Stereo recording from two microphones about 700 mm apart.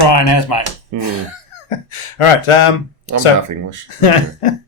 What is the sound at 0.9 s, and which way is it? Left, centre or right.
Speech, right.